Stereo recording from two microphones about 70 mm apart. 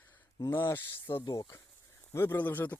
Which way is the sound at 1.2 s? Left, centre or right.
Left.